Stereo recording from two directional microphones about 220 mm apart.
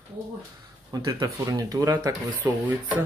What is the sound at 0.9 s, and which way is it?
Speech, 20° right (ahead or behind).